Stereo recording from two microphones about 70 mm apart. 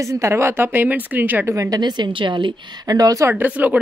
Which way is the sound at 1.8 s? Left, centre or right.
Right.